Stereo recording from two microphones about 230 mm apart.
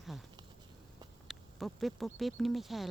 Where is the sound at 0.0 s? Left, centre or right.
Centre.